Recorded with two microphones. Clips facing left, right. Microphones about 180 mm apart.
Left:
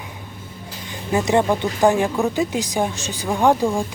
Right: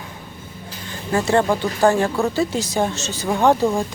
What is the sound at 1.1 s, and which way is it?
Speech, 15° left (ahead or behind).